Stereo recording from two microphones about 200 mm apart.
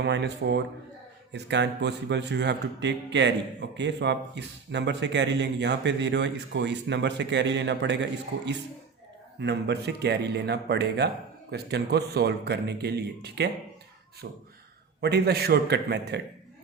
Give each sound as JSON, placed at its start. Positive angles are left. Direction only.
{"t": 0.0, "sound": "a man's voice", "side_deg": -60}
{"t": 9.4, "sound": "a man's voice", "side_deg": -60}